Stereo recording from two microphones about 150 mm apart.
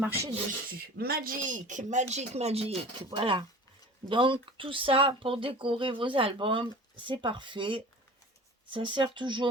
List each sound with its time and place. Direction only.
0.0 s speech: 15° right (ahead or behind)
0.7 s speech: 85° right; by 9.5 s 30° right (ahead or behind)